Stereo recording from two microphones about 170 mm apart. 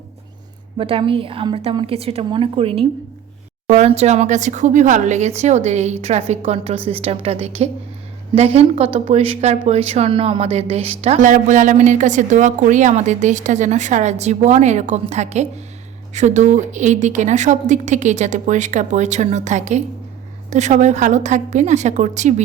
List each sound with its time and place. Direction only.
0.8 s a woman's voice: 30° right (ahead or behind)